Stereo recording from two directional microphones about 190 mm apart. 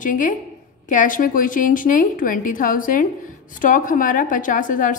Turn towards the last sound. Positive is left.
turn(degrees=45)  # may be behind; listen again after turning